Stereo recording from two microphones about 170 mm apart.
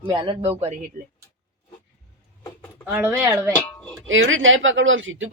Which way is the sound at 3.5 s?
10° left (ahead or behind).